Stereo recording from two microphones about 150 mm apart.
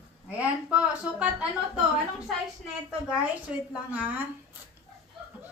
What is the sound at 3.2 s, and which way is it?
Speech, 10° right (ahead or behind).